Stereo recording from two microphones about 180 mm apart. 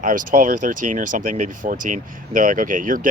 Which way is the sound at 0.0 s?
45° right (ahead or behind).